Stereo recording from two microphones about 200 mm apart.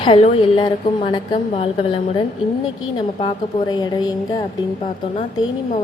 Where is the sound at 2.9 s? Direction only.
20° left (ahead or behind).